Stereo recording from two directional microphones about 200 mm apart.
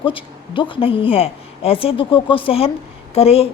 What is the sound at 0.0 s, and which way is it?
A woman's voice, 25° left (ahead or behind).